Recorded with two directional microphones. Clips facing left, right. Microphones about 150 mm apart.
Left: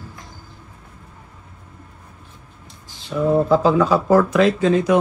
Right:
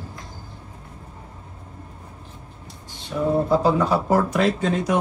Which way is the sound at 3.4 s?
90° left.